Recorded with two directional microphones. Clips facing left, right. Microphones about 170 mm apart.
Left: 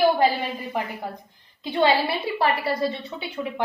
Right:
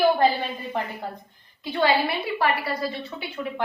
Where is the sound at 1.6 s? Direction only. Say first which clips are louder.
Left 1 dB; 20° left (ahead or behind).